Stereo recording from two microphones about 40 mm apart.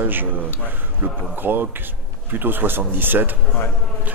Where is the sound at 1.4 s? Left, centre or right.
Right.